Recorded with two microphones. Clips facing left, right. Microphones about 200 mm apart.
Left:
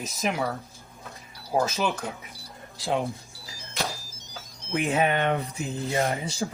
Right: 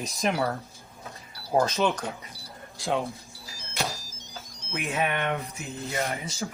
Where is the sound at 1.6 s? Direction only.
5° left (ahead or behind).